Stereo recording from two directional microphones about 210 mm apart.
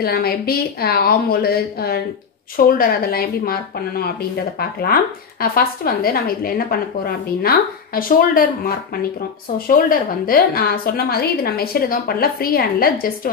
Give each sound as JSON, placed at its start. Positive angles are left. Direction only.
{"t": 0.0, "sound": "speech", "side_deg": 45}